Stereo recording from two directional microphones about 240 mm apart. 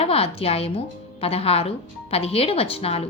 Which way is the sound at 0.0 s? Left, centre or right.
Left.